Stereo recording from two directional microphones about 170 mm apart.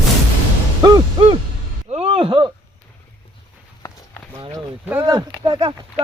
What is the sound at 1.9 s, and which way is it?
Speech, 35° right (ahead or behind).